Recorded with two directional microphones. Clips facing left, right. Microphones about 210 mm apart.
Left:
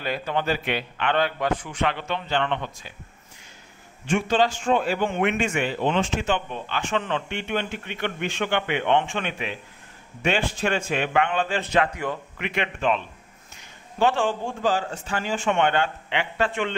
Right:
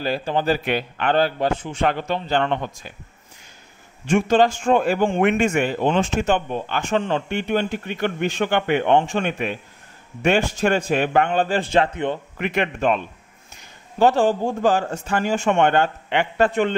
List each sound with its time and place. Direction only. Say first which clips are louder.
0.0 s speech: right 4 dB; 30° right (ahead or behind)
1.8 s a man's voice: right 4 dB; 45° right (ahead or behind)
4.1 s a man's voice: right 5 dB; 45° right (ahead or behind); by 12.2 s 25° right (ahead or behind)
12.4 s a man's voice: right 7 dB; 45° right (ahead or behind)